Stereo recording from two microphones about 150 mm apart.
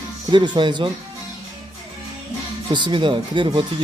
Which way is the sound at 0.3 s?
30° right (ahead or behind).